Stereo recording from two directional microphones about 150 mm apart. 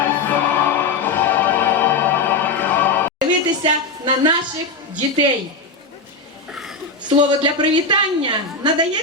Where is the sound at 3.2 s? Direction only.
30° right (ahead or behind).